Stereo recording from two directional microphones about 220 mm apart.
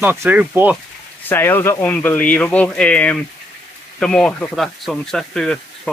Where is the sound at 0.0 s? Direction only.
10° right (ahead or behind).